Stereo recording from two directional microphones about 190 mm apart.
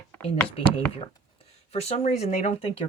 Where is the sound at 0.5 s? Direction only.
30° left (ahead or behind).